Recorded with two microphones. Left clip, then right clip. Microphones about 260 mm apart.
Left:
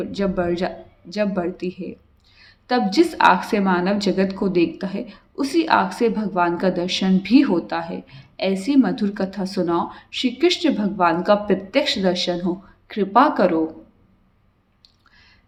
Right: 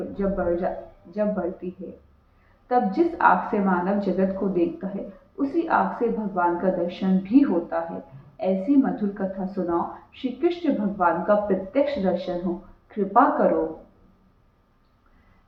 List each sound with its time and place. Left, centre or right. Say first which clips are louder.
0.1 s a woman's voice: left 1 dB; left
2.6 s a woman's voice: left 3 dB; left